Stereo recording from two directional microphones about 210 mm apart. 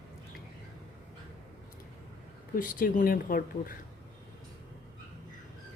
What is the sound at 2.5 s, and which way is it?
A woman's voice, 40° left (ahead or behind).